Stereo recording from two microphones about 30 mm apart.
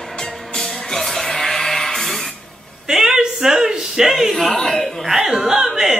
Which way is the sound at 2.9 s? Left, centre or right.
Centre.